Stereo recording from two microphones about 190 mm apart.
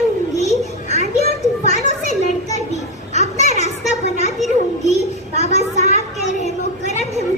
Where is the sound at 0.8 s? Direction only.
35° left (ahead or behind).